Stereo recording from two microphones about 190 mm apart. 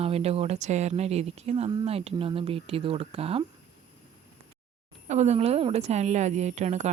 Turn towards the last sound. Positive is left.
turn(degrees=-35)  # may be behind; listen again after turning